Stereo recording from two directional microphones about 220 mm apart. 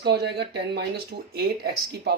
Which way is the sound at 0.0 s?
50° right (ahead or behind).